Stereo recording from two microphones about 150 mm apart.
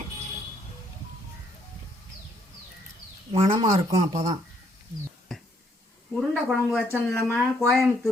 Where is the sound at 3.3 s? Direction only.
35° right (ahead or behind).